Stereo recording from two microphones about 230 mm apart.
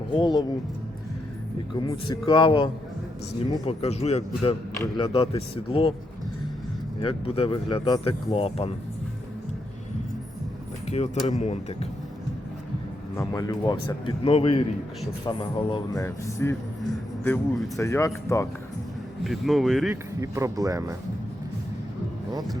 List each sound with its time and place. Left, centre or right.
0.1 s speech: centre
1.9 s speech: centre
3.7 s speech: left
7.0 s speech: left
10.8 s speech: left
13.1 s speech: centre
19.2 s speech: centre
20.2 s speech: centre